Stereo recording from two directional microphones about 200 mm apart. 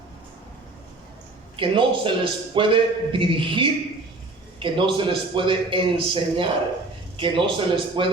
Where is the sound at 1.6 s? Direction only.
25° right (ahead or behind).